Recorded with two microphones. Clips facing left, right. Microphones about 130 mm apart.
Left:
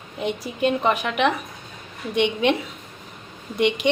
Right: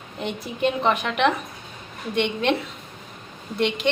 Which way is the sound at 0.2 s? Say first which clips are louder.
Left 2 dB; 5° left (ahead or behind).